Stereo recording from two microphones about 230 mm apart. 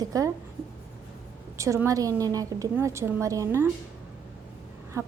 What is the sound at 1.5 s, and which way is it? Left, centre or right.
A woman's voice, centre.